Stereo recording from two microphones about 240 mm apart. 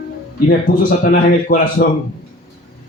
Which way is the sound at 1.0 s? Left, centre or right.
Left.